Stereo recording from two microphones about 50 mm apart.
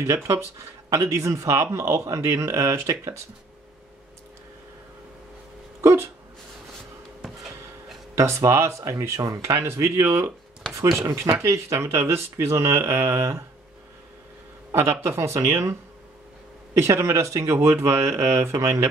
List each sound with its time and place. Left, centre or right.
0.0 s a man's voice: right
5.8 s a sound: right
8.2 s speech: right
11.4 s speech: right
14.7 s speech: right
16.7 s speech: right
17.6 s speech: right